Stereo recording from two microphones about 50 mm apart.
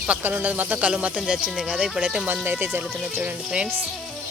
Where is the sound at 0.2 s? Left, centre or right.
Right; by 1.9 s centre.